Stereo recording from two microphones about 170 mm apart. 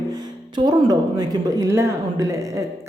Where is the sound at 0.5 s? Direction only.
25° right (ahead or behind).